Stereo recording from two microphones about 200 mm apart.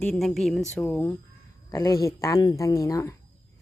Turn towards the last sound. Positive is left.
turn(degrees=15)  # may be behind; listen again after turning